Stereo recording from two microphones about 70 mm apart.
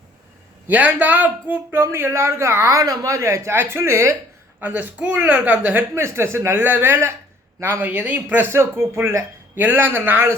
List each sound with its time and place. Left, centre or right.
0.7 s a woman's voice: right
1.8 s speech: right
2.7 s a woman's voice: right
4.6 s a woman's voice: right
5.9 s a woman's voice: right